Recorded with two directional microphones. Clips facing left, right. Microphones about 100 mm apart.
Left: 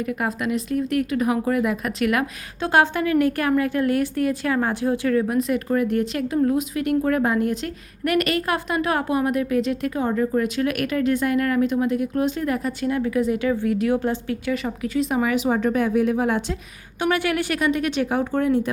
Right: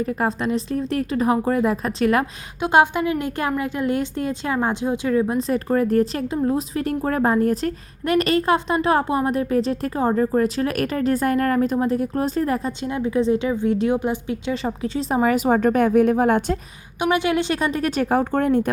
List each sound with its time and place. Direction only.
0.0 s a woman's voice: 35° right (ahead or behind)
2.6 s a woman's voice: 15° right (ahead or behind); by 7.7 s 40° right (ahead or behind)
8.0 s a woman's voice: 30° right (ahead or behind); by 16.6 s 50° right (ahead or behind)
17.0 s a woman's voice: 20° right (ahead or behind); by 18.7 s 50° right (ahead or behind)